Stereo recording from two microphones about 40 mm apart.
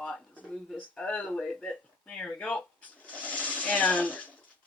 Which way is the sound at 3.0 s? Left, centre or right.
Left.